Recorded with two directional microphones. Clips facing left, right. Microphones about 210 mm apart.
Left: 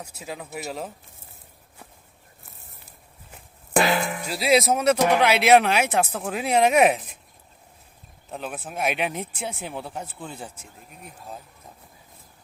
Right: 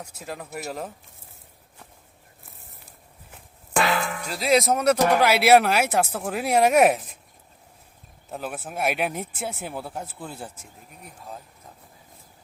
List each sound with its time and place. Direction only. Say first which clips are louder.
0.0 s speech: even; centre (ahead or behind)
3.8 s music: left 2 dB; 30° left (ahead or behind)
4.3 s speech: left 1 dB; 5° left (ahead or behind)
8.3 s speech: right 1 dB; 5° right (ahead or behind)